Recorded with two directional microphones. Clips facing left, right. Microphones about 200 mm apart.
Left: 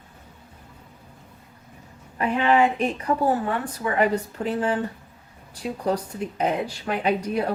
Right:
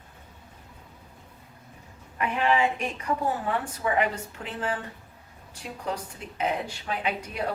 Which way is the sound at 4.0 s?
40° left (ahead or behind).